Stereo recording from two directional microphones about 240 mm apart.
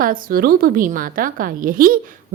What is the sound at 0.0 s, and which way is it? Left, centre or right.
A woman's voice, right.